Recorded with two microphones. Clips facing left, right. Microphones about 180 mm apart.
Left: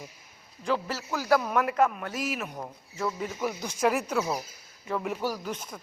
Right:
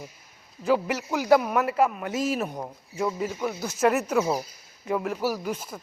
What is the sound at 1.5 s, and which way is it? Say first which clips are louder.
Speech: right 2 dB; 5° right (ahead or behind).